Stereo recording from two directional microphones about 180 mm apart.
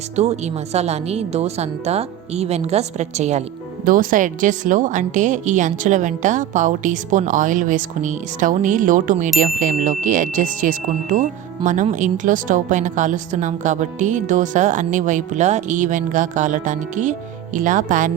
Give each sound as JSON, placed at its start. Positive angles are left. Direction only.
{"t": 0.2, "sound": "a woman's voice", "side_deg": -35}
{"t": 3.8, "sound": "speech", "side_deg": -50}